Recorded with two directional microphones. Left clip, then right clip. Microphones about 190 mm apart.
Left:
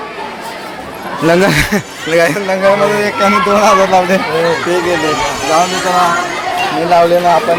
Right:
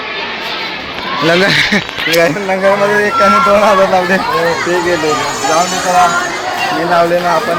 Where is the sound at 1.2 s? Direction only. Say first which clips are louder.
Even; 20° left (ahead or behind).